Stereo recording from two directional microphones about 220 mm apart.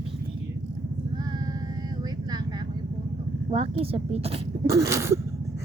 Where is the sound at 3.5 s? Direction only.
25° right (ahead or behind).